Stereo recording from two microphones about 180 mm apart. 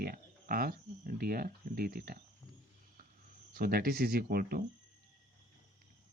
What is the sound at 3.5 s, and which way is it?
Speech, 55° right (ahead or behind).